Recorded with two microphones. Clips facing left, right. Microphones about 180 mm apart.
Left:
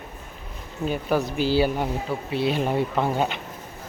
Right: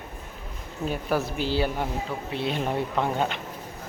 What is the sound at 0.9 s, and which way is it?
Speech, centre (ahead or behind).